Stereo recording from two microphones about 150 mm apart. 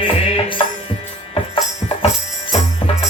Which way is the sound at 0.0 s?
35° left (ahead or behind).